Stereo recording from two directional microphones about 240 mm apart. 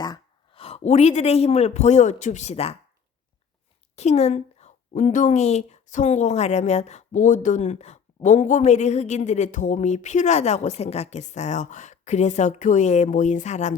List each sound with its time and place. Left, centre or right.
0.0 s speech: centre
3.9 s a woman's voice: left